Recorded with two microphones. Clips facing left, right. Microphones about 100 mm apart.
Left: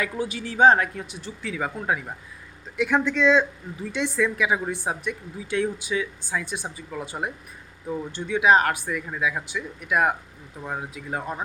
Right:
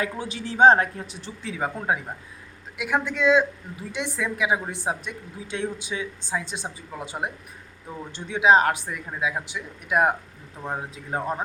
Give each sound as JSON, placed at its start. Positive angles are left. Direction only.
{"t": 0.0, "sound": "a woman's voice", "side_deg": -25}
{"t": 2.7, "sound": "a woman's voice", "side_deg": -10}